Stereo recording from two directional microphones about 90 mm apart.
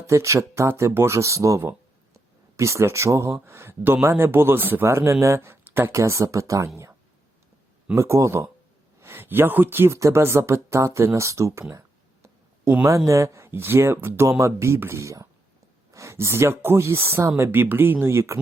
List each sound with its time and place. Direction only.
0.1 s speech: 35° right (ahead or behind)
7.9 s speech: 35° right (ahead or behind)
13.1 s speech: 35° right (ahead or behind)